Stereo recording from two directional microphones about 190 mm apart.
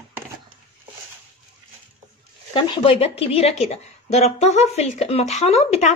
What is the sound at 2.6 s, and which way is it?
A woman's voice, 25° left (ahead or behind).